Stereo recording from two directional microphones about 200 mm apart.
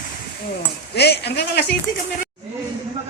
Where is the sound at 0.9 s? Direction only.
55° left (ahead or behind).